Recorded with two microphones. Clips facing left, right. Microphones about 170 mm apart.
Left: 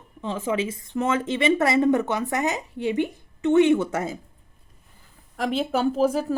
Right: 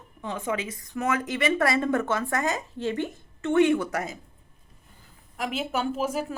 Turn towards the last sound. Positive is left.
turn(degrees=35)  # may be behind; listen again after turning